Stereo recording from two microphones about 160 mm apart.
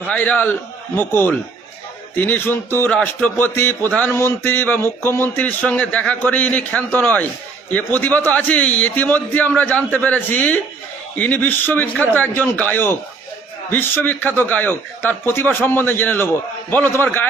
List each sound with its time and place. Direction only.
0.0 s a man's voice: 10° left (ahead or behind)